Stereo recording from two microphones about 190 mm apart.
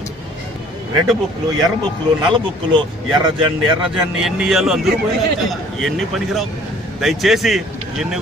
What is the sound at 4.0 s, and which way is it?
Speech, 5° right (ahead or behind).